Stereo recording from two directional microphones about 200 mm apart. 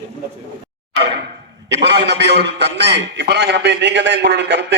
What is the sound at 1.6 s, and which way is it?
A man's voice, 60° right (ahead or behind).